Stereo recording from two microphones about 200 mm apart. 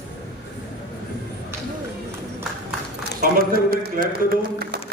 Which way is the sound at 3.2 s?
45° right (ahead or behind).